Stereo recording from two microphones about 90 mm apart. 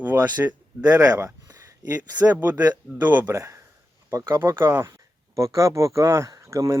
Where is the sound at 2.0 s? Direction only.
20° right (ahead or behind).